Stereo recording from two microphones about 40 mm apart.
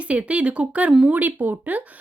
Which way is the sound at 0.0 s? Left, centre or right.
Right.